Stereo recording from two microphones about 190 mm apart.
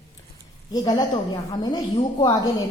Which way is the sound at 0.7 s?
20° left (ahead or behind).